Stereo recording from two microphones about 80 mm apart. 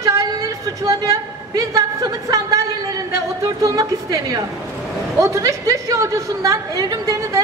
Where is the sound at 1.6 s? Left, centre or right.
Right.